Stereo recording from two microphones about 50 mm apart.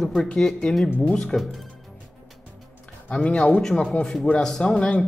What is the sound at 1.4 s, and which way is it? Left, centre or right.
Speech, centre.